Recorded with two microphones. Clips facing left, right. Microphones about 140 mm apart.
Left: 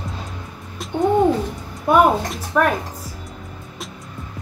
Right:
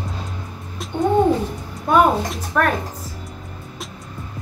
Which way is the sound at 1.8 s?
5° left (ahead or behind).